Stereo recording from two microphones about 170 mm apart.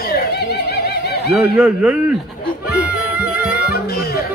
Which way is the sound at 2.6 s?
5° right (ahead or behind).